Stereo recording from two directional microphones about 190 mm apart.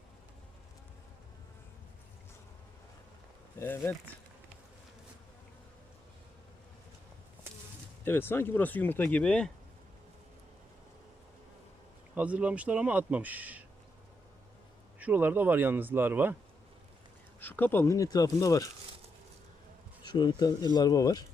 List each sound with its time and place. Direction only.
3.6 s speech: 10° left (ahead or behind)
8.0 s speech: 10° left (ahead or behind)
12.1 s speech: 5° right (ahead or behind)
14.9 s speech: 10° right (ahead or behind)
17.4 s speech: 10° left (ahead or behind)
20.1 s speech: 20° left (ahead or behind)